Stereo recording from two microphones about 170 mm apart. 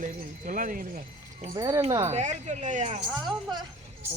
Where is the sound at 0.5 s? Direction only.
50° right (ahead or behind).